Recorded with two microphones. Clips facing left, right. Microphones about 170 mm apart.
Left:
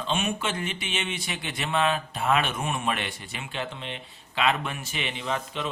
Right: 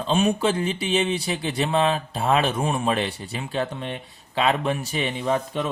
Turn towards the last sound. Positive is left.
turn(degrees=-40)  # may be behind; listen again after turning